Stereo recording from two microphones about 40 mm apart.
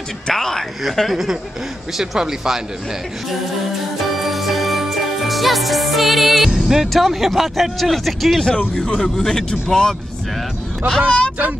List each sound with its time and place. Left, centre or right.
0.3 s speech: centre
1.1 s speech: centre
4.0 s music: centre
6.5 s speech: centre
6.9 s speech: centre
8.5 s speech: centre
11.1 s speech: left